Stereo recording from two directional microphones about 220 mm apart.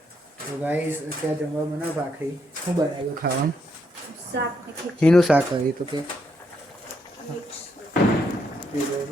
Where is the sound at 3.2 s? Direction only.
45° right (ahead or behind).